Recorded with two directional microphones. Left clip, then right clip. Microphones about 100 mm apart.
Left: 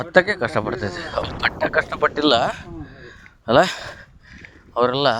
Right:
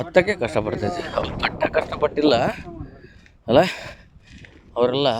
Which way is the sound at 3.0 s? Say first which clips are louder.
Left 3 dB; 25° right (ahead or behind).